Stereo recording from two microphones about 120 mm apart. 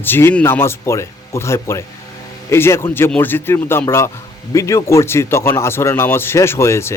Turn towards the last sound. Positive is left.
turn(degrees=20)  # may be behind; listen again after turning